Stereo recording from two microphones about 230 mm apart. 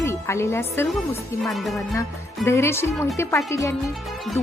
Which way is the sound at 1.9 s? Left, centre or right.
Centre.